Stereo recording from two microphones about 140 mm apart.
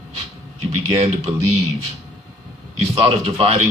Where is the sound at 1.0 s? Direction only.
50° right (ahead or behind).